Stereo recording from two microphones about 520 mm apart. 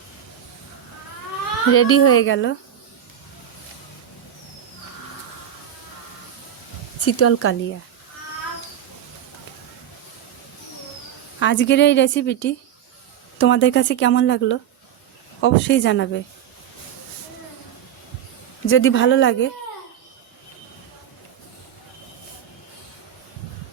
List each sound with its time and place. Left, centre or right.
1.7 s a woman's voice: left
7.0 s a woman's voice: left
11.3 s a woman's voice: left
18.6 s a woman's voice: left